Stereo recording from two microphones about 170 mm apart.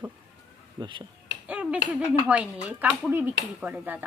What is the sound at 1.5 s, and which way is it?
Finger snapping, 5° right (ahead or behind).